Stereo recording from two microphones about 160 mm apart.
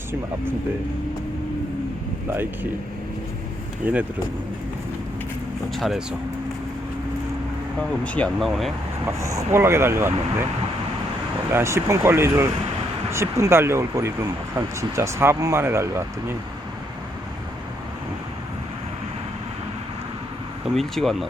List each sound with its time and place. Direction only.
3.8 s speech: 10° right (ahead or behind)
5.7 s speech: centre (ahead or behind)
8.0 s speech: 5° left (ahead or behind)
9.1 s speech: 20° right (ahead or behind)
11.5 s speech: 15° right (ahead or behind)
20.7 s speech: centre (ahead or behind)